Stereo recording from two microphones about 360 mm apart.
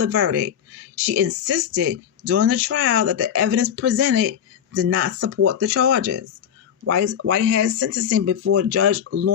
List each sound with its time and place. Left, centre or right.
0.0 s speech: right